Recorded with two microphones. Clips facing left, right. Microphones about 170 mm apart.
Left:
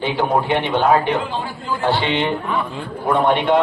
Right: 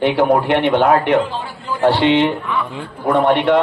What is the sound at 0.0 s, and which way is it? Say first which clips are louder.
A man's voice: right 5 dB; 70° right (ahead or behind).